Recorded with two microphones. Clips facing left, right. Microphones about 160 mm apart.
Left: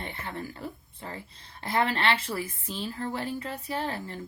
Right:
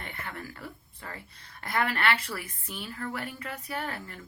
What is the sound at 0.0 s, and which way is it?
Speech, 25° left (ahead or behind).